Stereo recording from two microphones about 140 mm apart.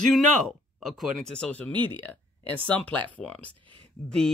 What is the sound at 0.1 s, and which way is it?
Speech, centre (ahead or behind).